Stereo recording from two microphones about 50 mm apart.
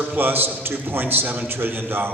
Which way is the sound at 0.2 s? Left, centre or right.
Right.